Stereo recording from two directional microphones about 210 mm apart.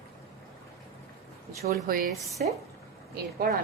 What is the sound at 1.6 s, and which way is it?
A woman's voice, 45° right (ahead or behind).